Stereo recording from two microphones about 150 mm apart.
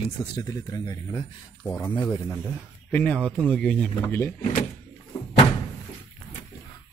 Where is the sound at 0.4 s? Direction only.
25° left (ahead or behind).